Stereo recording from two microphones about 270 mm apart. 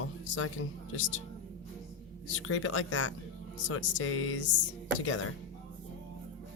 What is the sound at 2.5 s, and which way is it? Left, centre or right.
Speech, left.